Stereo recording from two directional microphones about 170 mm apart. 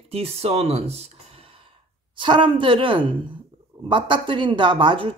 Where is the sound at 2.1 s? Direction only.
30° right (ahead or behind).